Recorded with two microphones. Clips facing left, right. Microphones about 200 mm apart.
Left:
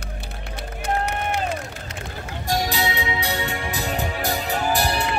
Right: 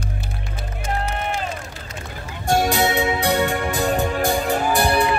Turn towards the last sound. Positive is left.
turn(degrees=-55)  # may be behind; listen again after turning